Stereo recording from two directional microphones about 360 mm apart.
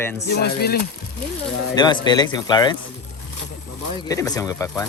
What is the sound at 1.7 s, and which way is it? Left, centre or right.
Speech, centre.